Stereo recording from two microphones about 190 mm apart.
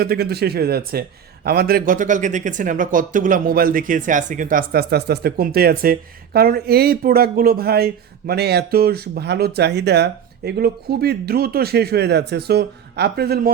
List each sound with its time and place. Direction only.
0.0 s speech: 55° right (ahead or behind)